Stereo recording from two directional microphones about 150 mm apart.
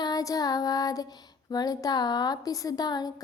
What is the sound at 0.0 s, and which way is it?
Child singing, 25° left (ahead or behind).